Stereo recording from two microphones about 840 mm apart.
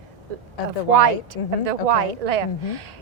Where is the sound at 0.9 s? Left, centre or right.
Right.